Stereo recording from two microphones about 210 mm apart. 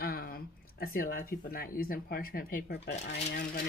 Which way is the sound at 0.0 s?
45° left (ahead or behind).